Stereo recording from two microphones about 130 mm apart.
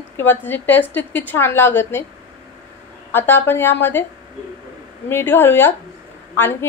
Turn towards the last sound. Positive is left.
turn(degrees=15)  # may be behind; listen again after turning